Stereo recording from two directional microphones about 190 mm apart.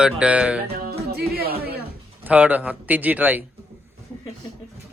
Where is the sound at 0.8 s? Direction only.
55° right (ahead or behind).